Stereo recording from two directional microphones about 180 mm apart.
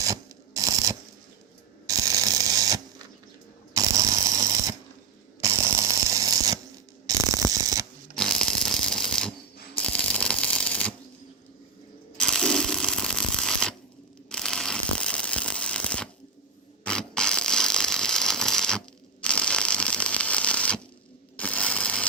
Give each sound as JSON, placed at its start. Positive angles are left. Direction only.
{"t": 0.0, "sound": "mechanisms", "side_deg": -20}
{"t": 3.8, "sound": "a sound", "side_deg": -20}
{"t": 7.2, "sound": "mechanisms", "side_deg": -20}
{"t": 8.1, "sound": "shuffling cards", "side_deg": 5}
{"t": 12.1, "sound": "shuffling cards", "side_deg": 5}
{"t": 14.3, "sound": "a sound", "side_deg": 5}
{"t": 16.8, "sound": "mechanisms", "side_deg": 5}
{"t": 19.2, "sound": "a sound", "side_deg": 5}
{"t": 21.3, "sound": "ratchet", "side_deg": 5}